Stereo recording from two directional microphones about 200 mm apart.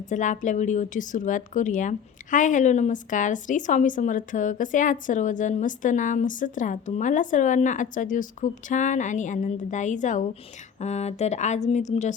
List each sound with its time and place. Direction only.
0.1 s a woman's voice: 40° left (ahead or behind)